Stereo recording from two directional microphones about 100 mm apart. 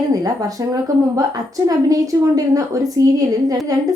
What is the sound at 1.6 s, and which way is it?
A woman's voice, 35° right (ahead or behind).